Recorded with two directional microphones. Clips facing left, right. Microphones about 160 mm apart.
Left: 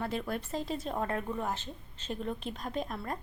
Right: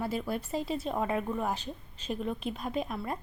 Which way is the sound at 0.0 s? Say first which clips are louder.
Right 2 dB; 5° right (ahead or behind).